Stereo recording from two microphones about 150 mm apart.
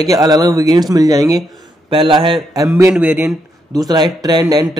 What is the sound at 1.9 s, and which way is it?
Speech, 35° right (ahead or behind).